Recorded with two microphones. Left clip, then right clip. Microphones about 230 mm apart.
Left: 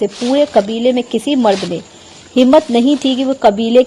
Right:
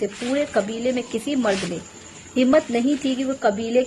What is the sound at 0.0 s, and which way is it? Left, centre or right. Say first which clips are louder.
Speech: left 10 dB; left.